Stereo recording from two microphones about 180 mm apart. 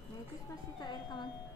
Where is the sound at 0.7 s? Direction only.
25° left (ahead or behind).